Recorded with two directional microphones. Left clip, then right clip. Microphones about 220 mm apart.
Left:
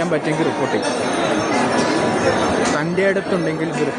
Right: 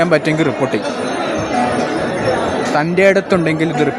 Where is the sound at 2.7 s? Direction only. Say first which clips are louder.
Right 6 dB; 25° right (ahead or behind).